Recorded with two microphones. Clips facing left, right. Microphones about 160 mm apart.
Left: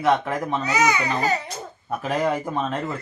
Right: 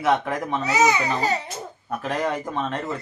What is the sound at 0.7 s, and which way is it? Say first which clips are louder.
Speech: right 2 dB; 30° right (ahead or behind).